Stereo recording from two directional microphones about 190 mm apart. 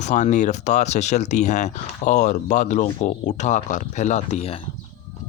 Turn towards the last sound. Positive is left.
turn(degrees=30)  # may be behind; listen again after turning